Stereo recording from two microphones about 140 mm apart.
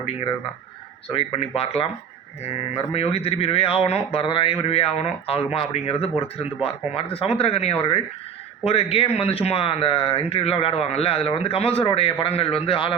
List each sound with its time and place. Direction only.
1.0 s speech: 40° left (ahead or behind)